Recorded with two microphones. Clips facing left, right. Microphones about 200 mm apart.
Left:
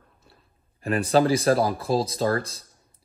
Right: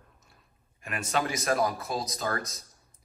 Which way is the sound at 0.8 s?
35° left (ahead or behind).